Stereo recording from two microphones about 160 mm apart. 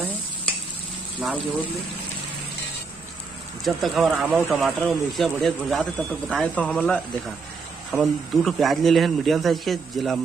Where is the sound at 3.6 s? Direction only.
Centre (ahead or behind).